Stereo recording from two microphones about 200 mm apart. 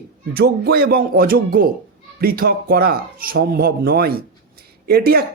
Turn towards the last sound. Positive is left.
turn(degrees=-50)  # may be behind; listen again after turning